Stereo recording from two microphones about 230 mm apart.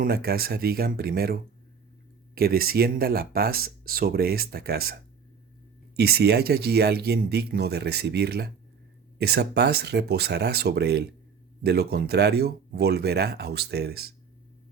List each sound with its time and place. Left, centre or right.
0.0 s speech: right
6.0 s speech: right